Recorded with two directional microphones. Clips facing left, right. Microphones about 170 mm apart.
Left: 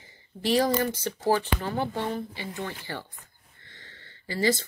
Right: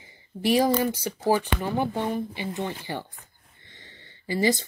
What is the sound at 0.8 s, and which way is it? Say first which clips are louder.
Speech: right 2 dB; 10° right (ahead or behind).